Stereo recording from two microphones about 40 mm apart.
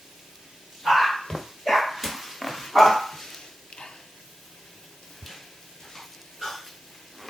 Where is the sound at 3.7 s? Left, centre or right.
Centre.